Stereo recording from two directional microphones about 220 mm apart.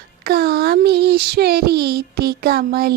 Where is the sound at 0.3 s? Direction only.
45° right (ahead or behind).